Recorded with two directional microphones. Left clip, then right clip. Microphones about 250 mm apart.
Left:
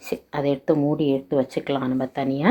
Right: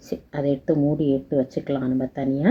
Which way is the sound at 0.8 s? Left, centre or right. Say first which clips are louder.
Even; left.